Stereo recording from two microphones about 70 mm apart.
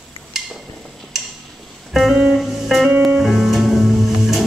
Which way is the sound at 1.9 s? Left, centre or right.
Centre.